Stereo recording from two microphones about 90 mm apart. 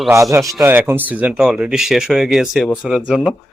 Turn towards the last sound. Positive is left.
turn(degrees=0)  # may be behind; listen again after turning